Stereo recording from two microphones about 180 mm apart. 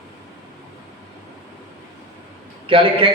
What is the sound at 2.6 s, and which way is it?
Speech, 30° right (ahead or behind).